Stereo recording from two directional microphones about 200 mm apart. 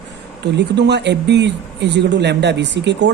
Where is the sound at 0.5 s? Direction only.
60° right (ahead or behind).